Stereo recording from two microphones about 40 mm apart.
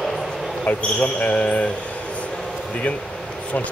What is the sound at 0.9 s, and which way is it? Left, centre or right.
Speech, left.